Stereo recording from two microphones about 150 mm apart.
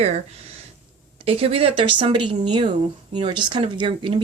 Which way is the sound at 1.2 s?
40° right (ahead or behind).